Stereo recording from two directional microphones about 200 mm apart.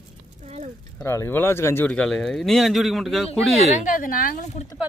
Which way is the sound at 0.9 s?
15° left (ahead or behind).